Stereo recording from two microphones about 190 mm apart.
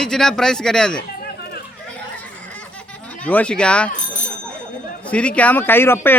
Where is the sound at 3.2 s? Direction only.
5° left (ahead or behind).